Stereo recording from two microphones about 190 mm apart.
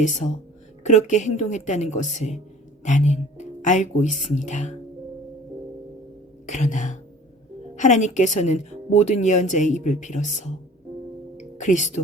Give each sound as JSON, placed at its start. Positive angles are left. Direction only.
{"t": 0.0, "sound": "speech", "side_deg": 40}
{"t": 6.5, "sound": "speech", "side_deg": 40}
{"t": 11.3, "sound": "music", "side_deg": 40}